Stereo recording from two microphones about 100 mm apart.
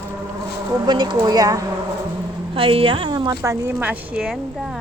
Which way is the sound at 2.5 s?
65° right (ahead or behind).